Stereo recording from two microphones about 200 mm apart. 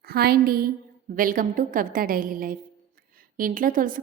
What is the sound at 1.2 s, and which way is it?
A woman's voice, 45° right (ahead or behind).